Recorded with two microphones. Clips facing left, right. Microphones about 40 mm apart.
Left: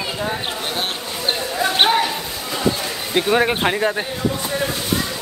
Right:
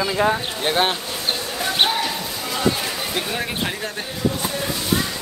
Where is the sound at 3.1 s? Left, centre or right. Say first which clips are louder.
Left 11 dB; left.